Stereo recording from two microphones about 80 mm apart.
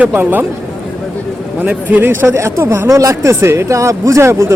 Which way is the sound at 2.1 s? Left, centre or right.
Right.